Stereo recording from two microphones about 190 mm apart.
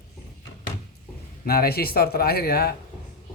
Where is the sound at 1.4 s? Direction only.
55° left (ahead or behind).